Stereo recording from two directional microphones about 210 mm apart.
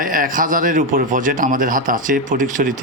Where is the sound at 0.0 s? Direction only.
40° right (ahead or behind).